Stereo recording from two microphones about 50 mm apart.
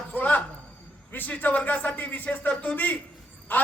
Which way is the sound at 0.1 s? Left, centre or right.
Left.